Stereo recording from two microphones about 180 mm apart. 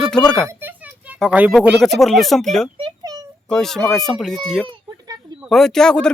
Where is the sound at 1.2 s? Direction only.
5° right (ahead or behind).